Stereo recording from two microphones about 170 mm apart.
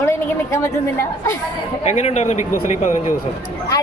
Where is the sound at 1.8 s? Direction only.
40° left (ahead or behind).